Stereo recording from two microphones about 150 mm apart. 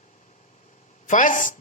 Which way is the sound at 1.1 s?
60° left (ahead or behind).